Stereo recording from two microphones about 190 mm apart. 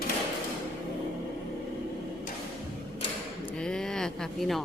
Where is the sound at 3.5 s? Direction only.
5° left (ahead or behind).